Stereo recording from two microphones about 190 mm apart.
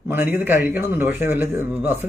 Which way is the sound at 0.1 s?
10° right (ahead or behind).